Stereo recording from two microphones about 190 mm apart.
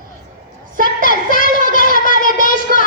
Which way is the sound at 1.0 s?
45° left (ahead or behind).